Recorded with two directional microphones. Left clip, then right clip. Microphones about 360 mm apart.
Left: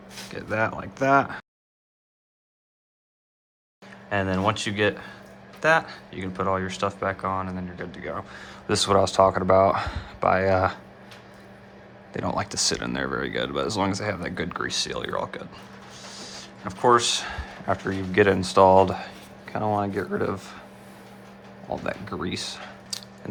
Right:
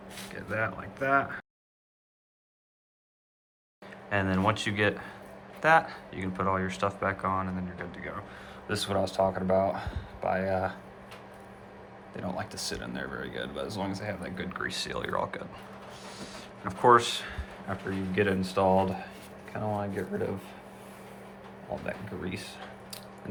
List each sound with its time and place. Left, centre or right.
0.3 s speech: centre
3.8 s speech: centre
9.2 s speech: left
9.6 s speech: centre
12.4 s speech: centre
21.8 s speech: centre